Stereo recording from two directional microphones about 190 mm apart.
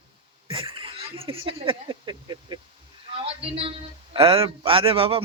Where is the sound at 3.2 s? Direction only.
30° right (ahead or behind).